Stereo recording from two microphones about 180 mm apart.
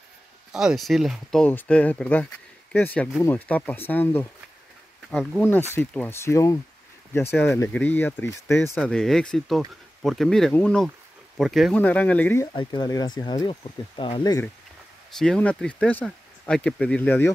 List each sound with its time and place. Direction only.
0.5 s speech: 5° right (ahead or behind)
12.5 s speech: 25° left (ahead or behind)
15.1 s speech: 5° left (ahead or behind)